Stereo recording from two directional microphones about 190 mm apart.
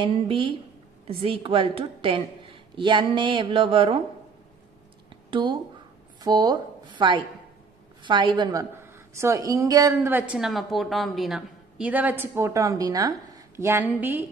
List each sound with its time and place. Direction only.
0.0 s a woman's voice: 25° right (ahead or behind)
5.1 s a sound: 25° right (ahead or behind)
6.2 s a woman's voice: 20° right (ahead or behind)